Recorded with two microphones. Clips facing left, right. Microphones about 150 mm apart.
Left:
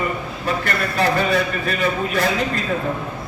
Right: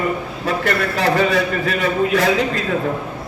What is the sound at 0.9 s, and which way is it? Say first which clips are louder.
A man's voice: even; 90° right.